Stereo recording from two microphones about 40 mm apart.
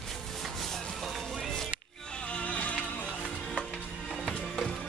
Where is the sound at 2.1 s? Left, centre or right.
Left.